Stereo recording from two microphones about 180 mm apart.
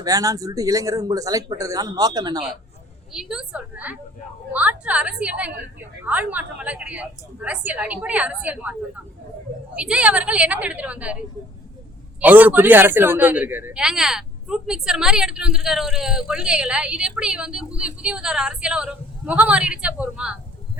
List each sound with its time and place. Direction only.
0.0 s speech: 20° right (ahead or behind)
3.1 s a man's voice: 5° right (ahead or behind)
9.7 s a woman's voice: 5° right (ahead or behind)
12.2 s a man's voice: 10° right (ahead or behind)